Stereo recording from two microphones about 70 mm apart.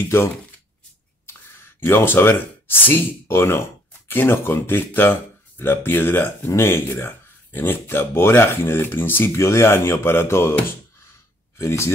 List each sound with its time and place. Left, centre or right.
1.9 s speech: left
11.5 s speech: left